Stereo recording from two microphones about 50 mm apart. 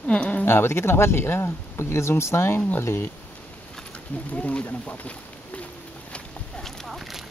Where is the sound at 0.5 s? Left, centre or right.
Left.